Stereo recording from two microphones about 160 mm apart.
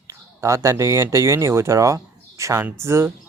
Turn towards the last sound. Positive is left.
turn(degrees=-15)  # may be behind; listen again after turning